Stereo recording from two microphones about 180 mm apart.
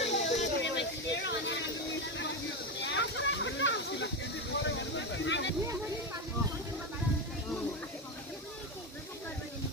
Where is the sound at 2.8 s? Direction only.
90° left.